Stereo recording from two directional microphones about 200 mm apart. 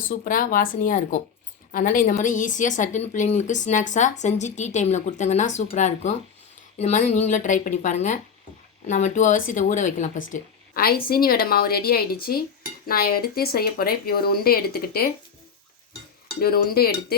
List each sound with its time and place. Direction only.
0.1 s a woman's voice: 45° left (ahead or behind)
16.3 s a woman's voice: 50° left (ahead or behind)